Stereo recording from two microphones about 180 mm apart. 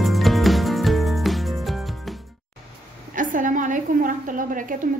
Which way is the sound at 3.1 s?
50° right (ahead or behind).